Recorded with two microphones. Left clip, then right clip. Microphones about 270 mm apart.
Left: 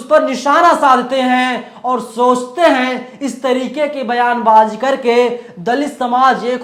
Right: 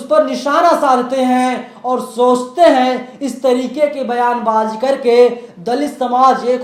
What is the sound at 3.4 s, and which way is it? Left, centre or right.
Speech, left.